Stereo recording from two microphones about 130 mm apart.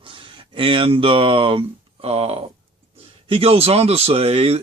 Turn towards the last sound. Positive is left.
turn(degrees=-50)  # may be behind; listen again after turning